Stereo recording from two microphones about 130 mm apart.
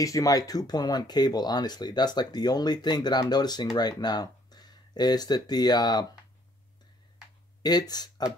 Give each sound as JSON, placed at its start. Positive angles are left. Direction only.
{"t": 0.0, "sound": "speech", "side_deg": 25}
{"t": 7.6, "sound": "speech", "side_deg": 30}